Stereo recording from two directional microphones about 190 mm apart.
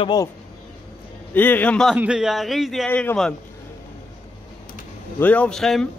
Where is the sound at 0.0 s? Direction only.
20° left (ahead or behind).